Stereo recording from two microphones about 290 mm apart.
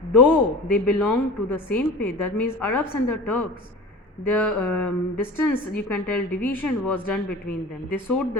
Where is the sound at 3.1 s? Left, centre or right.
Left.